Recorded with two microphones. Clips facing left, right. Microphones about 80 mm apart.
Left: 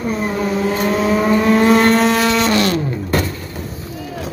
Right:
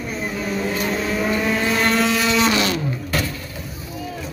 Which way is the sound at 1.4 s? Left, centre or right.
Left.